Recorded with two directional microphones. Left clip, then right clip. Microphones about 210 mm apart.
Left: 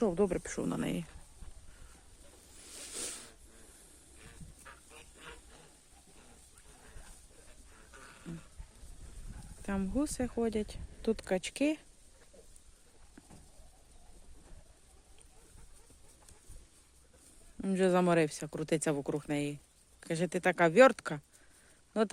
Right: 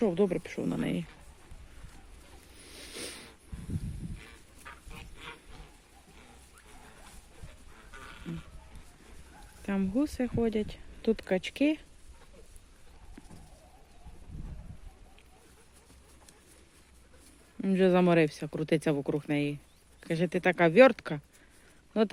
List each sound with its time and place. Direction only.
0.0 s speech: 10° left (ahead or behind)
0.4 s speech: 25° left (ahead or behind)
0.7 s speech: 10° left (ahead or behind)
2.6 s a sound: centre (ahead or behind)
4.2 s goose: 5° right (ahead or behind)
7.9 s a sound: centre (ahead or behind)
9.6 s speech: 5° left (ahead or behind)
17.6 s speech: centre (ahead or behind)